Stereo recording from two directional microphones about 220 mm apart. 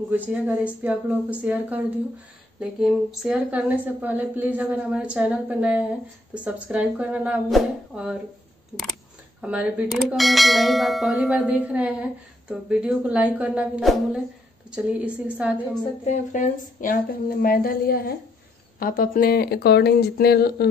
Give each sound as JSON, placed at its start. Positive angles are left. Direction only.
{"t": 0.1, "sound": "speech", "side_deg": -5}
{"t": 2.6, "sound": "bell", "side_deg": 0}
{"t": 6.3, "sound": "speech", "side_deg": -5}
{"t": 9.4, "sound": "bell", "side_deg": -5}
{"t": 14.8, "sound": "speech", "side_deg": -5}
{"t": 16.1, "sound": "a woman's voice", "side_deg": 35}